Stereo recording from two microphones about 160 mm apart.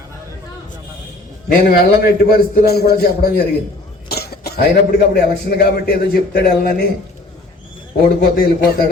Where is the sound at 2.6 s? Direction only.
80° left.